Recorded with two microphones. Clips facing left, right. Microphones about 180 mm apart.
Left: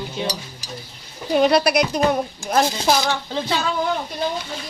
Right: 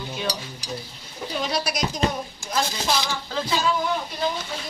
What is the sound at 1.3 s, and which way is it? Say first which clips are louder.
A woman's voice: left 11 dB; 60° left (ahead or behind).